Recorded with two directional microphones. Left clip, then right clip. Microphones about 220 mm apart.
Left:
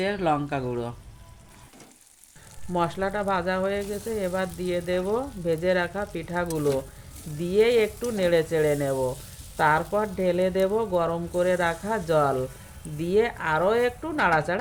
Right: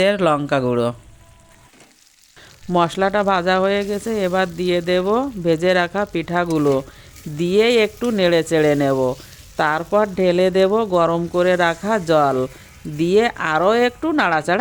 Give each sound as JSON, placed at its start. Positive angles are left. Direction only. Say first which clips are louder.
{"t": 0.0, "sound": "speech", "louder": "right 9 dB", "side_deg": -50}
{"t": 2.7, "sound": "speech", "louder": "right 9 dB", "side_deg": -50}